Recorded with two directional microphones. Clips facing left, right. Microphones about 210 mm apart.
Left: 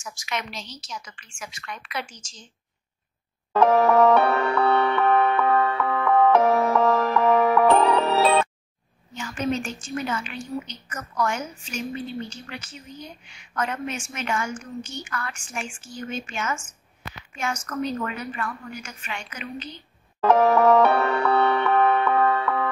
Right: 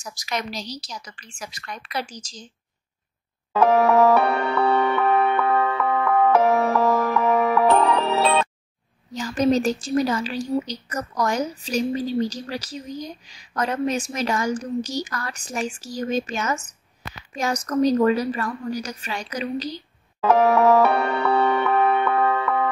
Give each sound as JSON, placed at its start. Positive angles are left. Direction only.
{"t": 0.0, "sound": "speech", "side_deg": -35}
{"t": 3.5, "sound": "music", "side_deg": -5}
{"t": 9.1, "sound": "speech", "side_deg": -35}
{"t": 20.2, "sound": "music", "side_deg": -5}